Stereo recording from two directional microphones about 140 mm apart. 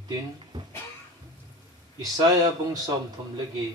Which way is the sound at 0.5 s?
30° right (ahead or behind).